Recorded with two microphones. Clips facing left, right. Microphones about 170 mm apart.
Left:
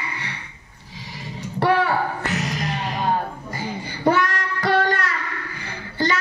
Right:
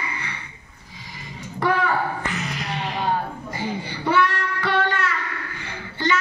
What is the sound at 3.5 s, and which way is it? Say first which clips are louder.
Child singing: right 2 dB; 40° left (ahead or behind).